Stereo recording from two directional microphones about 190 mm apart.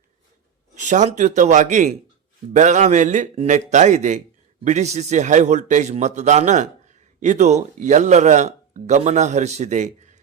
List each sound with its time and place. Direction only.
0.8 s a man's voice: 40° right (ahead or behind)